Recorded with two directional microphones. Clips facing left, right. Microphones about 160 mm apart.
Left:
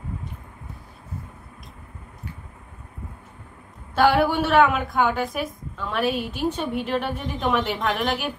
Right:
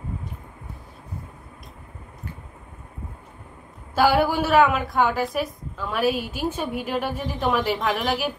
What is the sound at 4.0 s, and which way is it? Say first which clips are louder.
A woman's voice: even; 5° right (ahead or behind).